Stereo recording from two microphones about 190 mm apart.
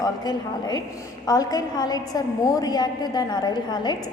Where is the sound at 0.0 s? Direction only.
20° left (ahead or behind).